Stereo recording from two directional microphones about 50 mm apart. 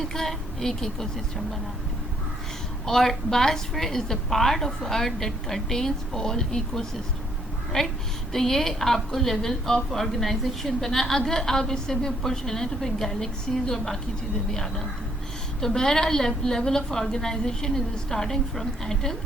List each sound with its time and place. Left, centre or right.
0.0 s a woman's voice: centre
2.8 s a woman's voice: centre
15.6 s a woman's voice: centre